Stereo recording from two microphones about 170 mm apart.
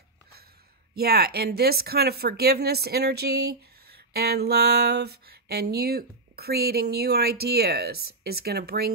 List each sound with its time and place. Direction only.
0.9 s speech: 65° right (ahead or behind)